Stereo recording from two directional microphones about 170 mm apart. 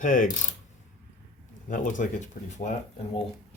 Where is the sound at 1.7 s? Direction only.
50° left (ahead or behind).